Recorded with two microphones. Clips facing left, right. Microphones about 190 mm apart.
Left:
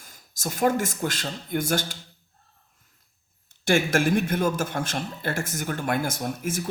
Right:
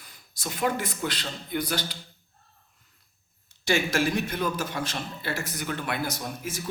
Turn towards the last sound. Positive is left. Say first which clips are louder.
# left 5 dB
turn(degrees=50)  # may be behind; listen again after turning